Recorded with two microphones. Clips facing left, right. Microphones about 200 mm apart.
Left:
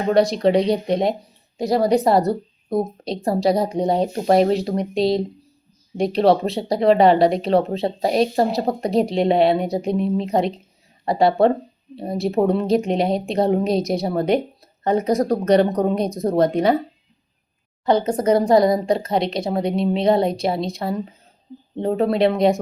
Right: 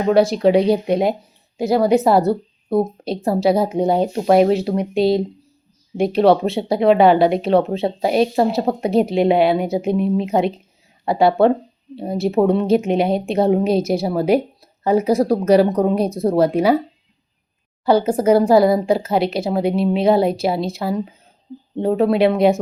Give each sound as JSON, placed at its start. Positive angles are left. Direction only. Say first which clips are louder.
{"t": 0.1, "sound": "a woman's voice", "louder": "right 2 dB", "side_deg": -5}
{"t": 2.2, "sound": "a woman's voice", "louder": "right 3 dB", "side_deg": -30}
{"t": 3.2, "sound": "speech", "louder": "right 2 dB", "side_deg": -5}
{"t": 16.0, "sound": "speech", "louder": "right 3 dB", "side_deg": -30}
{"t": 16.4, "sound": "speech", "louder": "right 1 dB", "side_deg": -5}
{"t": 17.8, "sound": "speech", "louder": "right 3 dB", "side_deg": -10}